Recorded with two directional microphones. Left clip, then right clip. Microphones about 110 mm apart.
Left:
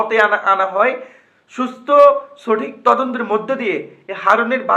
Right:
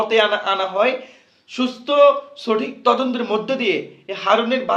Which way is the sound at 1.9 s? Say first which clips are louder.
Left 4 dB; 20° right (ahead or behind).